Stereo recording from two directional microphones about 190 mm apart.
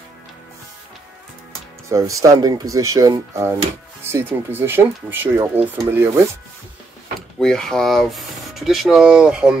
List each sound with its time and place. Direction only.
1.9 s speech: 15° right (ahead or behind)
7.2 s speech: 5° left (ahead or behind)